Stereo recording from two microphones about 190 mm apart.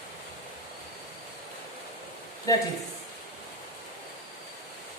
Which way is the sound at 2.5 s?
20° left (ahead or behind).